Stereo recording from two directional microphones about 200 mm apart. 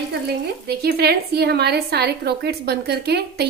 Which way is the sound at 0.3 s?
50° right (ahead or behind).